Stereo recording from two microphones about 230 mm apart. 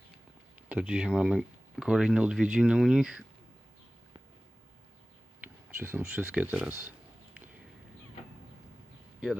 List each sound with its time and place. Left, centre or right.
0.7 s speech: centre
5.8 s speech: centre